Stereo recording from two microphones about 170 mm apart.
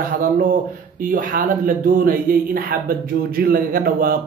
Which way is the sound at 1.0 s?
55° right (ahead or behind).